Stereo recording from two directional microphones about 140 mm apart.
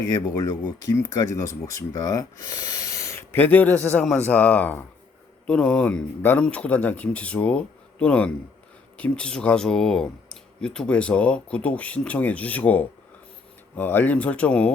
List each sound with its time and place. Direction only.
0.3 s speech: 25° left (ahead or behind); by 14.7 s 10° left (ahead or behind)